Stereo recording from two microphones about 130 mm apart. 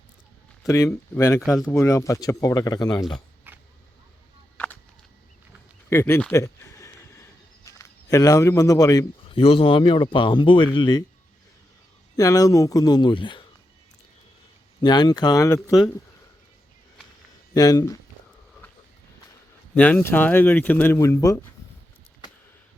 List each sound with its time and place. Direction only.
0.6 s speech: 25° left (ahead or behind)
1.4 s speech: 5° right (ahead or behind)
1.7 s speech: 20° left (ahead or behind)
3.5 s a sound: 15° right (ahead or behind)
4.5 s a sound: 10° left (ahead or behind)
5.9 s speech: 20° left (ahead or behind)
6.3 s a sound: 20° left (ahead or behind)
9.3 s speech: 45° left (ahead or behind)
12.1 s speech: 25° left (ahead or behind)
14.8 s speech: 35° left (ahead or behind)
17.5 s speech: 30° left (ahead or behind)
19.7 s speech: 15° left (ahead or behind)